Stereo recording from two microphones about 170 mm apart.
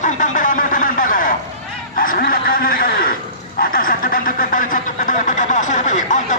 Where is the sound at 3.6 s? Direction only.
55° left (ahead or behind).